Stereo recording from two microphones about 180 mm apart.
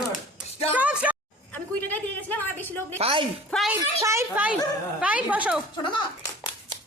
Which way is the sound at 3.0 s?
30° right (ahead or behind).